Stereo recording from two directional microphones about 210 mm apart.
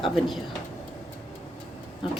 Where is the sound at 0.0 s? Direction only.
Centre (ahead or behind).